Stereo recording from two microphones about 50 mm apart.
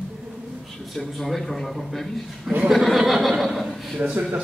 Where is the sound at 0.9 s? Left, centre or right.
Centre.